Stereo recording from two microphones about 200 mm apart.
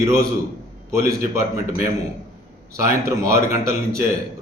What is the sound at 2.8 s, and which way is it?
Speech, 15° right (ahead or behind).